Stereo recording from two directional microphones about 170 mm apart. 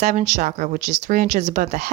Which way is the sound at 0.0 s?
45° right (ahead or behind).